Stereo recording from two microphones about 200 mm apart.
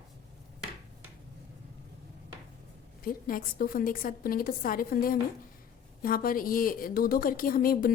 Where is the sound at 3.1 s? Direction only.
45° left (ahead or behind).